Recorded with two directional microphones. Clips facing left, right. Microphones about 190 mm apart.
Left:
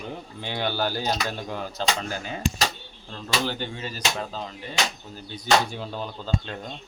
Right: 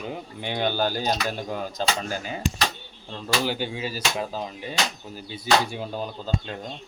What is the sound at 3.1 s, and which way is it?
Speech, 15° right (ahead or behind).